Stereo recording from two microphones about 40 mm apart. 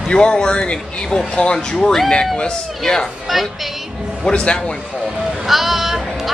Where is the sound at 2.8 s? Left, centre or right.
Centre.